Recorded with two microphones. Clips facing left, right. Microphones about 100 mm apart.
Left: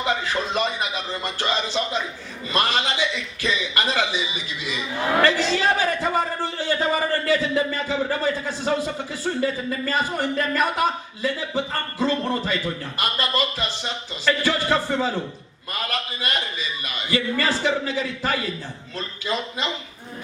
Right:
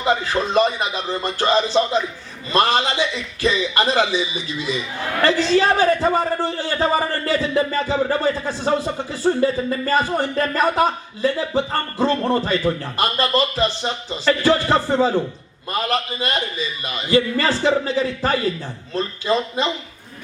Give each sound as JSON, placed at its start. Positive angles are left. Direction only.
{"t": 0.0, "sound": "a man's voice", "side_deg": -35}